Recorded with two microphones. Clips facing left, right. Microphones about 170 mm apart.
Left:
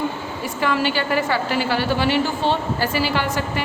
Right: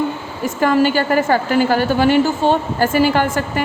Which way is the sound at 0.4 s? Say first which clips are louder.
Right 7 dB; 45° right (ahead or behind).